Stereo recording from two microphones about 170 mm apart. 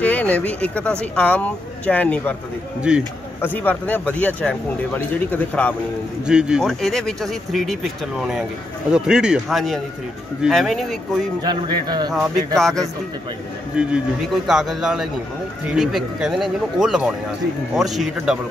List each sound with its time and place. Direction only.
0.0 s speech: 10° left (ahead or behind)
2.9 s speech: 5° right (ahead or behind)
3.3 s speech: 10° left (ahead or behind)
6.2 s speech: 5° right (ahead or behind)
11.4 s speech: 25° right (ahead or behind)
12.5 s speech: 5° left (ahead or behind)